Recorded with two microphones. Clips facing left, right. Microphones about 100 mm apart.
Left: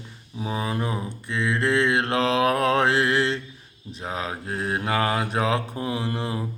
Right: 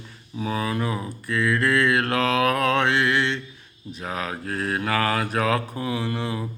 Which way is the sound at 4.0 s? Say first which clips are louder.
Even; 25° left (ahead or behind).